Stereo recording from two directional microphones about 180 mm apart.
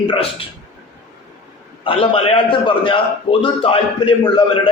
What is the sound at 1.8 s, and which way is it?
A man's voice, 30° left (ahead or behind).